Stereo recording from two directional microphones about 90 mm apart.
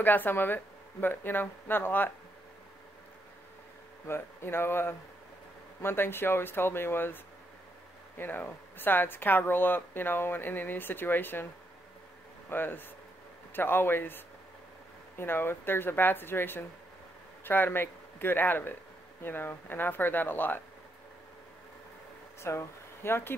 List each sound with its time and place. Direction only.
0.0 s speech: 20° left (ahead or behind)
4.1 s speech: 25° left (ahead or behind)
8.2 s speech: 20° left (ahead or behind)
12.4 s speech: 25° left (ahead or behind)
22.4 s speech: 30° left (ahead or behind)